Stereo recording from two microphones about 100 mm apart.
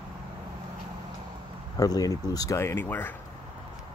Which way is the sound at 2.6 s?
25° left (ahead or behind).